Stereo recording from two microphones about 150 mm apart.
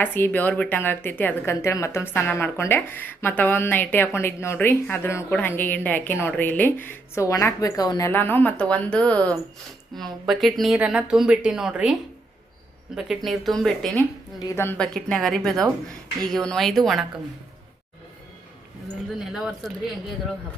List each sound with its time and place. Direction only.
0.0 s speech: 15° left (ahead or behind); by 11.9 s 5° right (ahead or behind)
13.0 s speech: centre (ahead or behind)
14.3 s speech: 20° left (ahead or behind)
14.8 s speech: 5° left (ahead or behind)
19.2 s speech: centre (ahead or behind)